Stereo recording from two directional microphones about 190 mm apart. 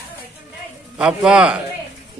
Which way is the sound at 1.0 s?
5° right (ahead or behind).